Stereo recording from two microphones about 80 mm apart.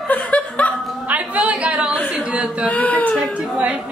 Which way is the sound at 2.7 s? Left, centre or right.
Centre.